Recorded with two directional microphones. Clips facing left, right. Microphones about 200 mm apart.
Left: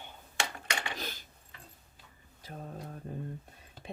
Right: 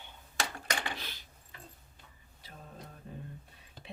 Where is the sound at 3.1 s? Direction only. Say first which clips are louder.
Left 5 dB; 45° left (ahead or behind).